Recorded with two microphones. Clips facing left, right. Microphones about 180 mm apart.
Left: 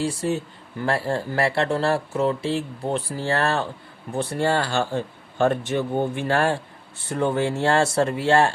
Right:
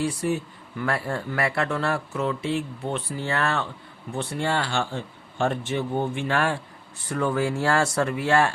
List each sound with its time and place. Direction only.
0.0 s speech: 25° left (ahead or behind)